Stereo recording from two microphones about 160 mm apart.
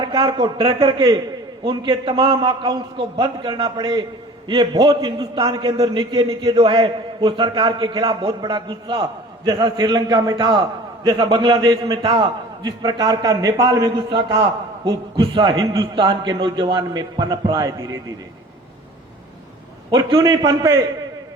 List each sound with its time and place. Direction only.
0.0 s a man's voice: 30° right (ahead or behind)
19.9 s a man's voice: 25° right (ahead or behind)